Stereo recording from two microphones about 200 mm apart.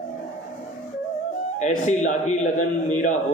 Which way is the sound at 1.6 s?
35° left (ahead or behind).